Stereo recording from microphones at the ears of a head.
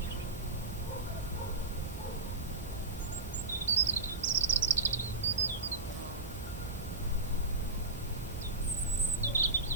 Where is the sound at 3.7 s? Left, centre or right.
Right.